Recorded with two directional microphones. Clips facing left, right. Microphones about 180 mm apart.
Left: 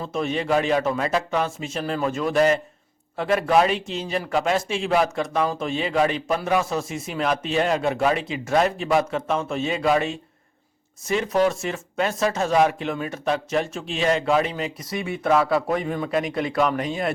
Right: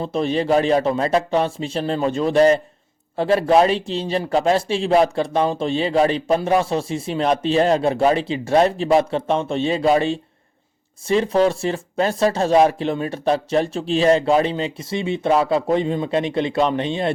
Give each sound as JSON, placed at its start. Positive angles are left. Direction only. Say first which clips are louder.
{"t": 0.0, "sound": "a man's voice", "louder": "right 5 dB", "side_deg": -30}